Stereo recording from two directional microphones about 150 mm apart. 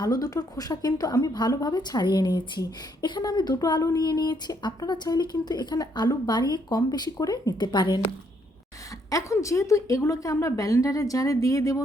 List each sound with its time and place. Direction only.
0.0 s speech: 25° left (ahead or behind)
9.0 s speech: 20° left (ahead or behind)